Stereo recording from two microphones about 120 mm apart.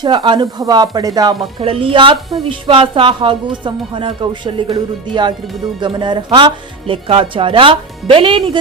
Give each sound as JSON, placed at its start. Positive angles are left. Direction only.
{"t": 0.0, "sound": "a woman's voice", "side_deg": -40}